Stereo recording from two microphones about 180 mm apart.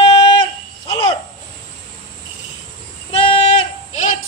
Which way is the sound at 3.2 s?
30° left (ahead or behind).